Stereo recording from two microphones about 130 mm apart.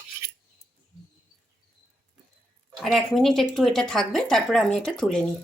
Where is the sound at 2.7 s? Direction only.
Centre (ahead or behind).